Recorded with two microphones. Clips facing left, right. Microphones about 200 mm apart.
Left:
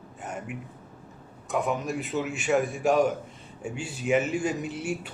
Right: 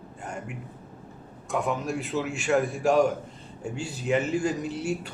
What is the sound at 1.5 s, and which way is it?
Speech, centre (ahead or behind).